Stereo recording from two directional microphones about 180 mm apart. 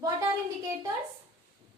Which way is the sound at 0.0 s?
20° right (ahead or behind).